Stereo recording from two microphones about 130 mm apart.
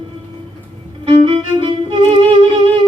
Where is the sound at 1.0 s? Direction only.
40° right (ahead or behind).